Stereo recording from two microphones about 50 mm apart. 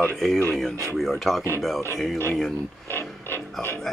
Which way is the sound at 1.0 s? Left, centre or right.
Centre.